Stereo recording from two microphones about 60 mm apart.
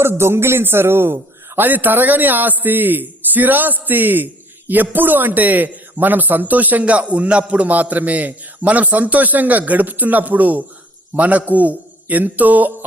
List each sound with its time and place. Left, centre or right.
0.0 s a man's voice: right